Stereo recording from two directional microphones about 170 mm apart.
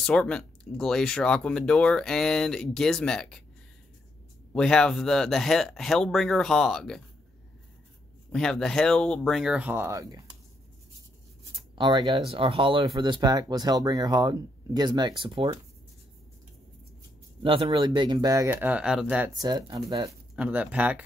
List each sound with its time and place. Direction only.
0.0 s speech: 5° left (ahead or behind)
4.5 s speech: 5° left (ahead or behind)
8.3 s speech: 5° left (ahead or behind); by 10.2 s 20° right (ahead or behind)
11.7 s speech: 25° right (ahead or behind)
17.4 s speech: 30° right (ahead or behind); by 19.3 s 5° right (ahead or behind)
19.3 s speech: 25° right (ahead or behind)
20.3 s speech: 10° right (ahead or behind)